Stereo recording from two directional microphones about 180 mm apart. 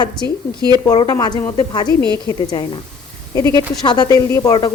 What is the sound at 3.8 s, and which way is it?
Speech, 25° left (ahead or behind).